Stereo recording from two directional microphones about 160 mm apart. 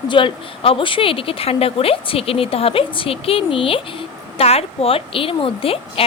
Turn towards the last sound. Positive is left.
turn(degrees=35)  # may be behind; listen again after turning